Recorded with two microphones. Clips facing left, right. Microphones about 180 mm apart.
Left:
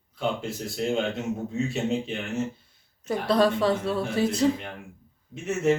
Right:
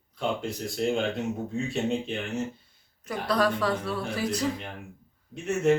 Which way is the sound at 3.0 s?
25° left (ahead or behind).